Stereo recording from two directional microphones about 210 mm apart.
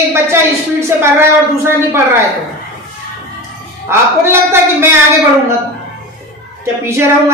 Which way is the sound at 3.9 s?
10° right (ahead or behind).